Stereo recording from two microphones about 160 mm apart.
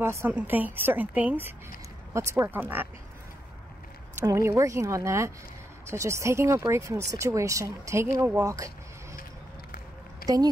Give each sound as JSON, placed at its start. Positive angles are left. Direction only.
{"t": 0.0, "sound": "a woman's voice", "side_deg": -15}
{"t": 4.1, "sound": "a woman's voice", "side_deg": -15}
{"t": 10.2, "sound": "speech", "side_deg": -25}